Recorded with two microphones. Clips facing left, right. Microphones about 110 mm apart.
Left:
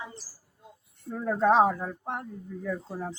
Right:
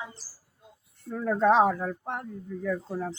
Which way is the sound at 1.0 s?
10° left (ahead or behind).